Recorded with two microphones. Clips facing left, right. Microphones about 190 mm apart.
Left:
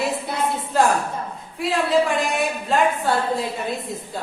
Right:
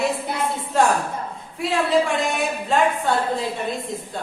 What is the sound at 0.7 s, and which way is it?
A woman's voice, centre (ahead or behind).